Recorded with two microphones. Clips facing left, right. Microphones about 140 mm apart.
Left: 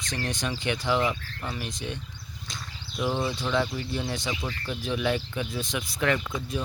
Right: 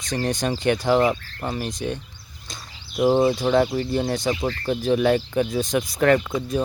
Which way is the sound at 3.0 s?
40° right (ahead or behind).